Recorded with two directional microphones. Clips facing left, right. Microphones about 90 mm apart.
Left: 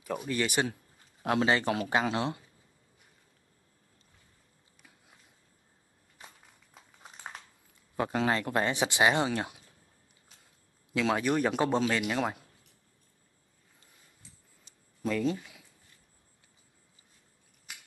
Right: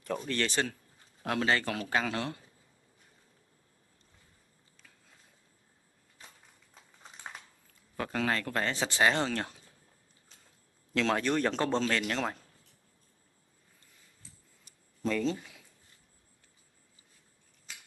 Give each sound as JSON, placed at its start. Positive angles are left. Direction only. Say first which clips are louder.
{"t": 0.0, "sound": "speech", "louder": "left 1 dB", "side_deg": 10}
{"t": 4.7, "sound": "a sound", "louder": "left 2 dB", "side_deg": 15}
{"t": 7.6, "sound": "speech", "louder": "left 5 dB", "side_deg": 20}
{"t": 10.9, "sound": "speech", "louder": "left 1 dB", "side_deg": 5}
{"t": 15.0, "sound": "speech", "louder": "left 1 dB", "side_deg": 10}